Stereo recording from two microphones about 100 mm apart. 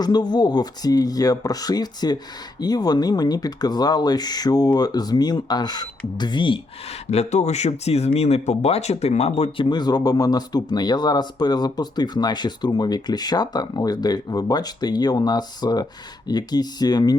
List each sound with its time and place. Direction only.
0.0 s speech: 45° left (ahead or behind)
7.1 s speech: 90° left
9.6 s speech: 45° left (ahead or behind)